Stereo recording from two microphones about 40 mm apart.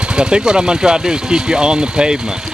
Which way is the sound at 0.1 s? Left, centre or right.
Right.